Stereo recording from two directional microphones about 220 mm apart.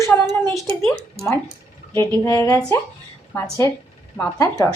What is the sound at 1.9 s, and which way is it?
Speech, 15° left (ahead or behind).